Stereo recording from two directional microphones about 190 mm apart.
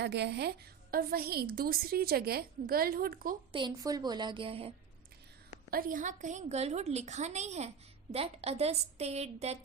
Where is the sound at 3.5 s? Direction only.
20° right (ahead or behind).